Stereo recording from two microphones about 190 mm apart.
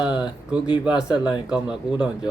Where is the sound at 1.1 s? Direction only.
20° left (ahead or behind).